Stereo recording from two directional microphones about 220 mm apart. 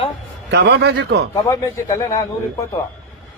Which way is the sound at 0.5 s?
50° right (ahead or behind).